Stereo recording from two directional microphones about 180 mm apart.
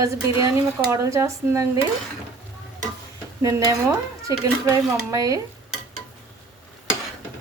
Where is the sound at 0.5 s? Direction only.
15° right (ahead or behind).